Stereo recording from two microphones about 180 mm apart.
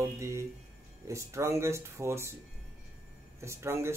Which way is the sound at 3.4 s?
15° right (ahead or behind).